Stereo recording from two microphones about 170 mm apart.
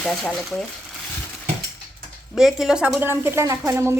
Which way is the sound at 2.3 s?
Centre (ahead or behind).